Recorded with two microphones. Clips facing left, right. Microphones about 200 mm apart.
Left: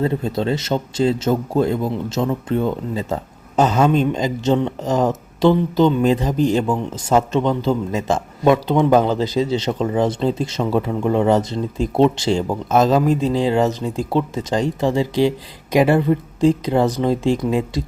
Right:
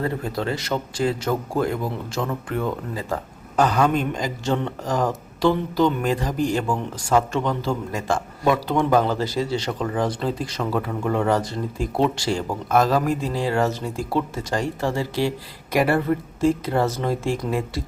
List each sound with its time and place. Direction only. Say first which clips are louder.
0.0 s speech: left 5 dB; 25° left (ahead or behind)